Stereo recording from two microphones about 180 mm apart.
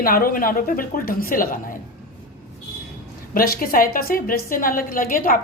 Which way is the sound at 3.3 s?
55° left (ahead or behind).